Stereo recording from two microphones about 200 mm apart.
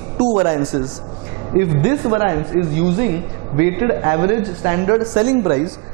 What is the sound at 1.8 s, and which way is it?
Speech, 20° right (ahead or behind).